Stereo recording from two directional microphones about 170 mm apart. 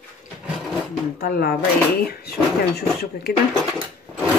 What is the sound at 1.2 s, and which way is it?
Speech, 60° left (ahead or behind).